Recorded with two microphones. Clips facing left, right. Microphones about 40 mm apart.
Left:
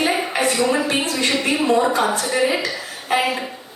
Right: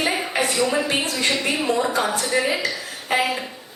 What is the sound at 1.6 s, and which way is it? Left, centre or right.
Speech, left.